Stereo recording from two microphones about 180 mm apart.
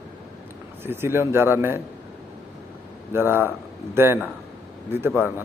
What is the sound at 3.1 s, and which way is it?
A man's voice, 10° right (ahead or behind).